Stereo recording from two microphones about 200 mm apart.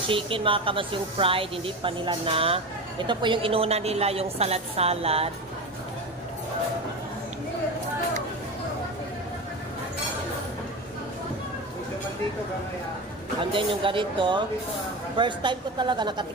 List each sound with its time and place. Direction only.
0.1 s speech: 25° right (ahead or behind)
13.5 s speech: 25° right (ahead or behind)